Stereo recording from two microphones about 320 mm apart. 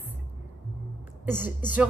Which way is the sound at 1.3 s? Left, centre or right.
Centre.